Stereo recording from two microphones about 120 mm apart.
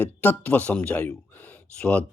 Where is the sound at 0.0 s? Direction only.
15° left (ahead or behind).